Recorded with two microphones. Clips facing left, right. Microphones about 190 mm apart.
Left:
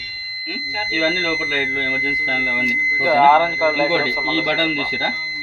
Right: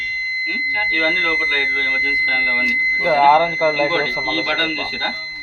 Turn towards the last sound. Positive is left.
turn(degrees=-5)  # may be behind; listen again after turning